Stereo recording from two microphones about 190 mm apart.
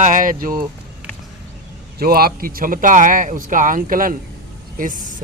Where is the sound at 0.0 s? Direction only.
45° right (ahead or behind).